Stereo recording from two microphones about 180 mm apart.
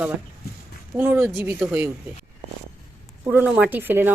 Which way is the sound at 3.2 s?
10° right (ahead or behind).